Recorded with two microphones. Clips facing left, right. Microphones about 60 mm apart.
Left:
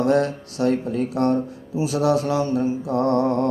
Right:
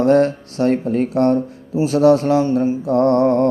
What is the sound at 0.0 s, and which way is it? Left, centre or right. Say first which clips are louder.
Speech: right 5 dB; right.